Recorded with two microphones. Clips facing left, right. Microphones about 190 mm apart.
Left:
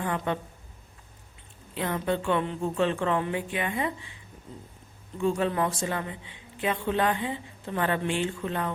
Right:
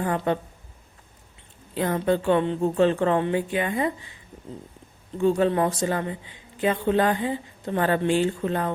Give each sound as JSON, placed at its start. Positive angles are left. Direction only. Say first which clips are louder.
{"t": 0.0, "sound": "speech", "louder": "right 5 dB", "side_deg": -40}
{"t": 1.7, "sound": "speech", "louder": "right 5 dB", "side_deg": -40}
{"t": 5.1, "sound": "speech", "louder": "right 5 dB", "side_deg": -35}